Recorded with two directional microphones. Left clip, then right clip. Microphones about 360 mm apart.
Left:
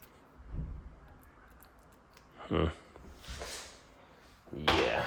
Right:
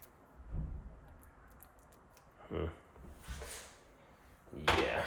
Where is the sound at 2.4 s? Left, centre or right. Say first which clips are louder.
Left 8 dB; left.